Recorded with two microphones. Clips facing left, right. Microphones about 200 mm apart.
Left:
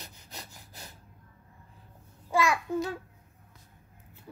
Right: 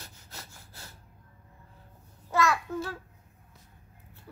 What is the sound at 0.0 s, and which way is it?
Sawing, 15° left (ahead or behind).